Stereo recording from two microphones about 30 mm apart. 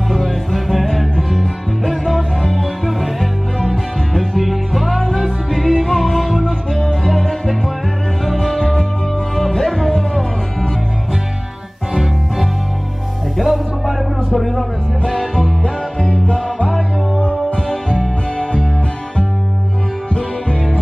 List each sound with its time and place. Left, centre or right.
0.1 s music: centre
4.9 s music: centre
11.9 s music: centre
15.1 s music: centre
15.6 s music: left
17.2 s music: left